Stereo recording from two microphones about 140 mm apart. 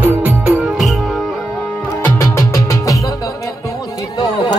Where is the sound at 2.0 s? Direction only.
20° left (ahead or behind).